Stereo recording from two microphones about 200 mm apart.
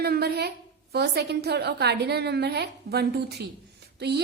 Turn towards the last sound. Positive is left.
turn(degrees=-55)  # may be behind; listen again after turning